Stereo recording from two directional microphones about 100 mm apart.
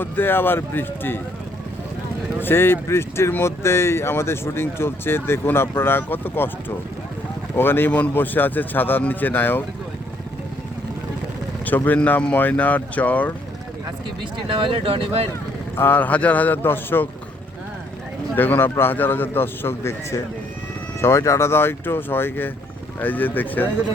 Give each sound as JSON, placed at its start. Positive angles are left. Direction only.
{"t": 0.0, "sound": "speech", "side_deg": 20}
{"t": 2.4, "sound": "speech", "side_deg": 25}
{"t": 11.6, "sound": "speech", "side_deg": 15}
{"t": 14.5, "sound": "speech", "side_deg": -60}
{"t": 15.7, "sound": "speech", "side_deg": 25}
{"t": 18.3, "sound": "speech", "side_deg": 20}